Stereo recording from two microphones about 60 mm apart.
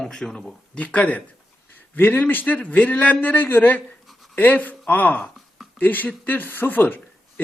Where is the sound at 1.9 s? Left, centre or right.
Left.